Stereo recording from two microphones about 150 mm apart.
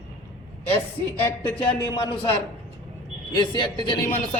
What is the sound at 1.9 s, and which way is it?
A man's voice, 35° left (ahead or behind).